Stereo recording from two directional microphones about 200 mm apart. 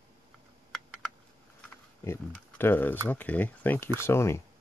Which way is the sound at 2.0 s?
10° left (ahead or behind).